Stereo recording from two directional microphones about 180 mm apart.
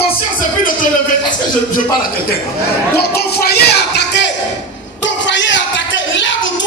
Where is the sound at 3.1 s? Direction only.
60° left (ahead or behind).